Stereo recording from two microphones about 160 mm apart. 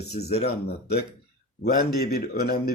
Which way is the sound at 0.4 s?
75° left (ahead or behind).